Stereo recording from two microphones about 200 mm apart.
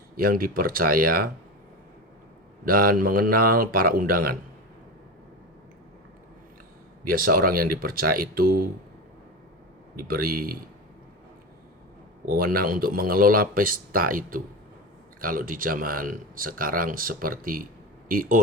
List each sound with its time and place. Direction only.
0.2 s speech: 45° right (ahead or behind)
2.6 s speech: 45° right (ahead or behind)
7.0 s speech: 45° right (ahead or behind)
9.9 s speech: 45° right (ahead or behind)
12.3 s speech: 45° right (ahead or behind)